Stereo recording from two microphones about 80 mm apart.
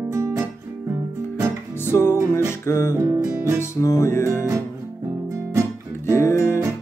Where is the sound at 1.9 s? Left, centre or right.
Left.